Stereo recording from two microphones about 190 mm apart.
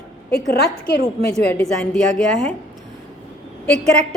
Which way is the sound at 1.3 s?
5° left (ahead or behind).